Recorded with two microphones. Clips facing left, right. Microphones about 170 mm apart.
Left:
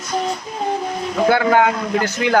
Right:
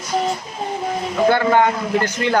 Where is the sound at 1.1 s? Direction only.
Centre (ahead or behind).